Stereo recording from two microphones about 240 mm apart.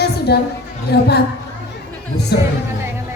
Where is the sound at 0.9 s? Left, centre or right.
Left.